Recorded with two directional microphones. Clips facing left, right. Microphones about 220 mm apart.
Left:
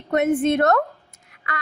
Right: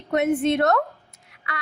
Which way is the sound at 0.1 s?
50° left (ahead or behind).